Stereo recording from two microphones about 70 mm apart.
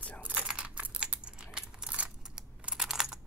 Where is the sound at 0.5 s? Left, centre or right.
Centre.